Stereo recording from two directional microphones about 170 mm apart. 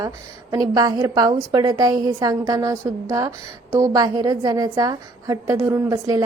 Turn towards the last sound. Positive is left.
turn(degrees=-20)  # may be behind; listen again after turning